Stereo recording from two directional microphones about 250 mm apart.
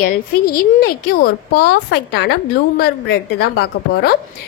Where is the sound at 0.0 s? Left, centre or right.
Left.